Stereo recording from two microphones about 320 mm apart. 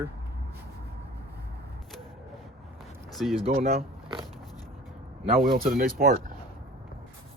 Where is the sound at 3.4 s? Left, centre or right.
Centre.